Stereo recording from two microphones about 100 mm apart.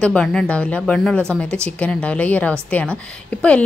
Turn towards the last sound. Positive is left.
turn(degrees=15)  # may be behind; listen again after turning